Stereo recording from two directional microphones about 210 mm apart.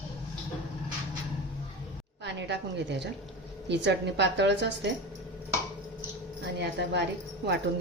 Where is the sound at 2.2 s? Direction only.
55° right (ahead or behind).